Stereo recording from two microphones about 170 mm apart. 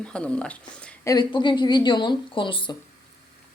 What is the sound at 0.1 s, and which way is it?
Speech, 5° left (ahead or behind).